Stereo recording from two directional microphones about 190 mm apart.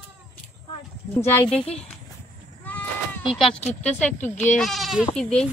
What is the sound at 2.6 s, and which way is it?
Sheep, 10° left (ahead or behind).